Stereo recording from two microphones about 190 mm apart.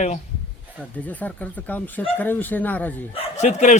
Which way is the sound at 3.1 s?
35° left (ahead or behind).